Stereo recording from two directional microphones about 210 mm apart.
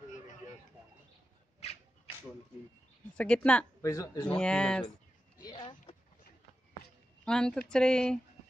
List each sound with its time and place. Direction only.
3.2 s speech: 5° left (ahead or behind)
4.4 s speech: 5° left (ahead or behind)
5.4 s a sound: 20° left (ahead or behind)
7.2 s speech: 5° left (ahead or behind)